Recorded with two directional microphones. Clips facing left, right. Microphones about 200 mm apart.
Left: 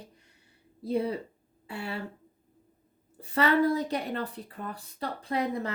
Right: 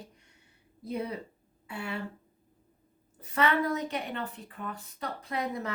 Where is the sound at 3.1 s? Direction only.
30° left (ahead or behind).